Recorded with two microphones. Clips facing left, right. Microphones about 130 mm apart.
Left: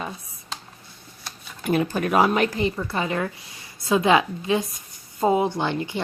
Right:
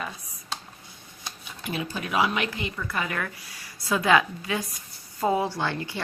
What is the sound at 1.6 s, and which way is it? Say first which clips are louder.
Speech: left 9 dB; 50° left (ahead or behind).